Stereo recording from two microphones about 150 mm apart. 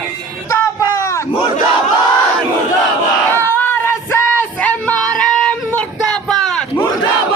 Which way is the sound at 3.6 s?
15° left (ahead or behind).